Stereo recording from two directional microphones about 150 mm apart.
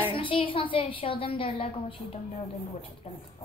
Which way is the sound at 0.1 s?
35° left (ahead or behind).